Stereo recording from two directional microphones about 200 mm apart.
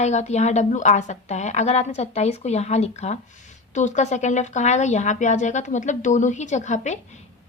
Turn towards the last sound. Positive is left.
turn(degrees=35)  # may be behind; listen again after turning